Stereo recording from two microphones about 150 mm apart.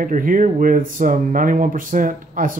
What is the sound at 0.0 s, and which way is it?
Speech, 65° right (ahead or behind).